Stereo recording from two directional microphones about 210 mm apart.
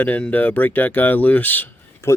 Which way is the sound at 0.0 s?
10° left (ahead or behind).